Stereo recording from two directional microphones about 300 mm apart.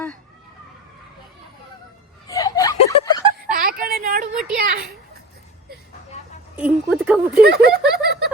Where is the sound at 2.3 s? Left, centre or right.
Centre.